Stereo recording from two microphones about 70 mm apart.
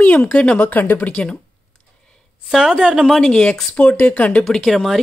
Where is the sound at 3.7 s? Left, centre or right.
Centre.